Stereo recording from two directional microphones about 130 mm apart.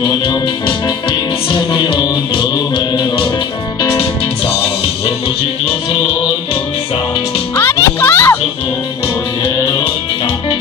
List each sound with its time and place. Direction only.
0.0 s music: 40° left (ahead or behind)
7.5 s music: 20° left (ahead or behind)